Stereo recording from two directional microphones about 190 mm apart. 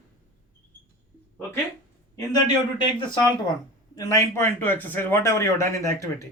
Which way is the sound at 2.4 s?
20° left (ahead or behind).